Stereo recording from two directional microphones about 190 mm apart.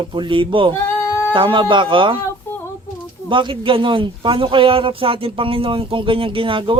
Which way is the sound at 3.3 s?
25° right (ahead or behind).